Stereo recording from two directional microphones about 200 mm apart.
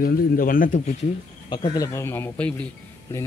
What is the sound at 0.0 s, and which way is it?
Speech, 45° left (ahead or behind).